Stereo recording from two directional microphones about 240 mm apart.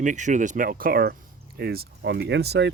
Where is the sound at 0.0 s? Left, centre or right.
Right.